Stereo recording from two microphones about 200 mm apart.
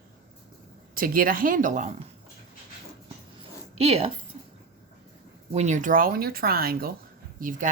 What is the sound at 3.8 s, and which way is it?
Speech, 30° right (ahead or behind).